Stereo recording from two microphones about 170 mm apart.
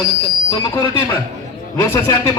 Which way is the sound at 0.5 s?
25° left (ahead or behind).